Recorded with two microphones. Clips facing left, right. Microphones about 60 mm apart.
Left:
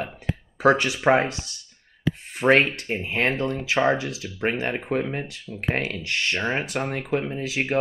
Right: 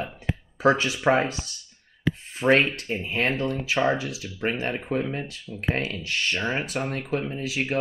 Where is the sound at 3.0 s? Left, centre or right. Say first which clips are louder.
Left 2 dB; left.